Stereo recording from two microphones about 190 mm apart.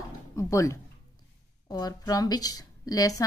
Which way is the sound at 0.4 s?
15° left (ahead or behind).